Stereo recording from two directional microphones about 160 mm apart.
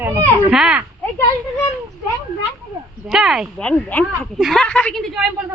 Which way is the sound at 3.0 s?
5° right (ahead or behind).